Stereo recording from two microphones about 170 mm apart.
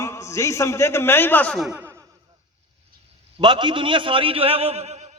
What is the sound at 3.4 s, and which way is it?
A man's voice, 25° right (ahead or behind).